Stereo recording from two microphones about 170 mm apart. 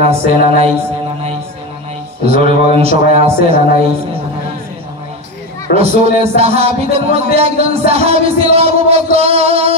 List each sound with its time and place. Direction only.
0.0 s music: 40° right (ahead or behind)
2.2 s music: 35° right (ahead or behind)
6.0 s music: 40° right (ahead or behind)